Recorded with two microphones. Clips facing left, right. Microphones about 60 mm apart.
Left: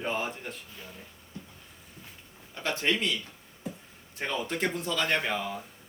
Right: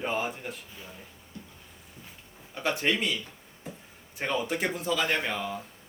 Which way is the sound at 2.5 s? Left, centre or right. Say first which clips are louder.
Right 1 dB; centre.